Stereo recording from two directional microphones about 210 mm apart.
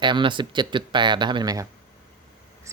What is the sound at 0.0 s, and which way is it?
Speech, 20° right (ahead or behind).